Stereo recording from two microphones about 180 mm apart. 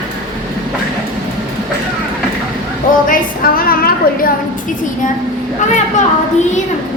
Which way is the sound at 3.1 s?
50° left (ahead or behind).